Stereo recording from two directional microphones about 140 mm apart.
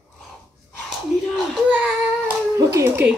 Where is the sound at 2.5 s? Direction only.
20° right (ahead or behind).